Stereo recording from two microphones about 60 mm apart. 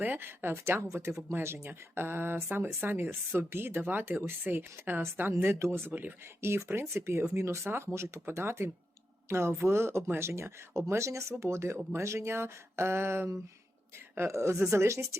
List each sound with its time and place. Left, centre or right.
0.0 s speech: right
5.3 s speech: right
5.9 s speech: right
6.4 s a woman's voice: right